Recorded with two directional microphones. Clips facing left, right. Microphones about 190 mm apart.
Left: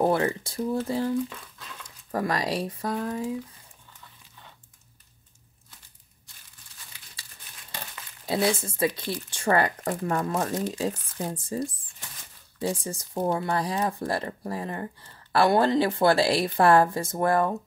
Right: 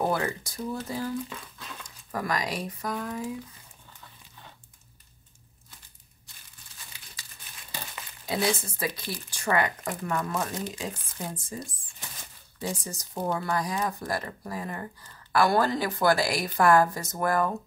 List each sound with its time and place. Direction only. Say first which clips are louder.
0.0 s speech: left 4 dB; 30° left (ahead or behind)
8.3 s speech: left 3 dB; 25° left (ahead or behind)